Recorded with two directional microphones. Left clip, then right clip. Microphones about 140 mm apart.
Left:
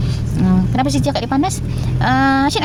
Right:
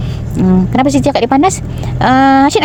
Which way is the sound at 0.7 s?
30° right (ahead or behind).